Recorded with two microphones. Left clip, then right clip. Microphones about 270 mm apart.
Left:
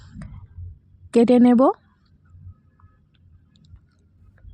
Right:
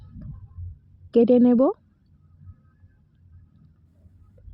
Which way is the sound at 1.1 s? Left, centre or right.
Left.